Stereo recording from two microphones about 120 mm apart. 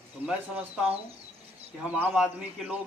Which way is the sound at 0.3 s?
10° right (ahead or behind).